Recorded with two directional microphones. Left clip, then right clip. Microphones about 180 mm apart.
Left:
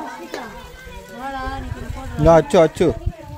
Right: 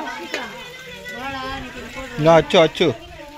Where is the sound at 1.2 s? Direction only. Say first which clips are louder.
Left 2 dB; 20° left (ahead or behind).